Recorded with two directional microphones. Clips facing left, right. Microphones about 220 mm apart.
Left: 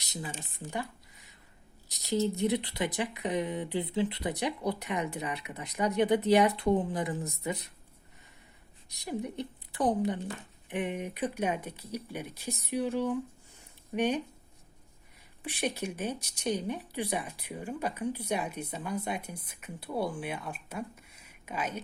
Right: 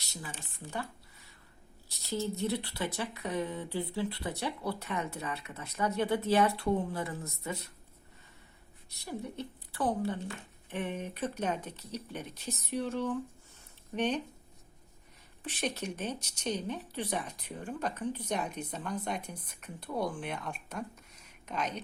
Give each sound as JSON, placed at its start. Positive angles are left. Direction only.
{"t": 0.0, "sound": "a woman's voice", "side_deg": 20}
{"t": 8.9, "sound": "a woman's voice", "side_deg": 15}
{"t": 15.4, "sound": "a woman's voice", "side_deg": 10}